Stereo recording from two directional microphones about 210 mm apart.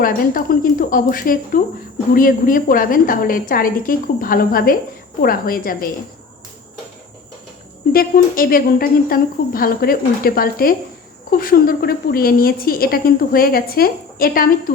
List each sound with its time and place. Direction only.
0.0 s a woman's voice: 40° left (ahead or behind)
7.9 s a woman's voice: 45° left (ahead or behind)